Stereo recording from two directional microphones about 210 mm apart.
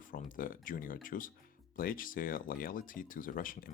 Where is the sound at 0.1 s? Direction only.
40° left (ahead or behind).